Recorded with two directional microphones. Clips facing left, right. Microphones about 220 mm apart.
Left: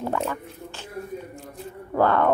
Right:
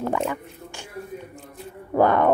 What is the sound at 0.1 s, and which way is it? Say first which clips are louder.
Speech: right 2 dB; 15° right (ahead or behind).